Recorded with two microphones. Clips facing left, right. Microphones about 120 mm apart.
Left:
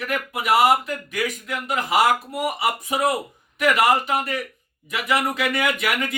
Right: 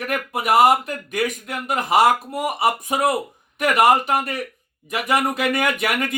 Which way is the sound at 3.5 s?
50° right (ahead or behind).